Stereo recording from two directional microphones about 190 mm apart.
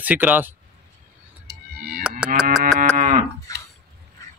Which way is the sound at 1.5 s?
55° right (ahead or behind).